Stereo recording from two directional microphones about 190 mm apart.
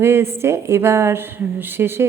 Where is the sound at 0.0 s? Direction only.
15° right (ahead or behind).